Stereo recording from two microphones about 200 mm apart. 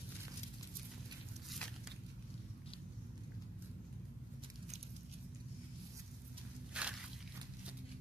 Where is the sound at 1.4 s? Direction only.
5° left (ahead or behind).